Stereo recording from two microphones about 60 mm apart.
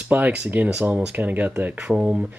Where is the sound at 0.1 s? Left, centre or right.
Right.